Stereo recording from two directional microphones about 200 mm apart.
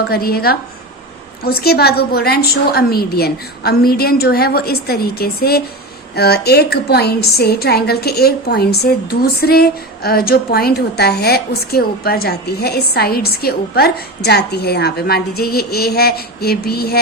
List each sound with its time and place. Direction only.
0.1 s a woman's voice: 50° left (ahead or behind)
1.5 s a woman's voice: 50° left (ahead or behind)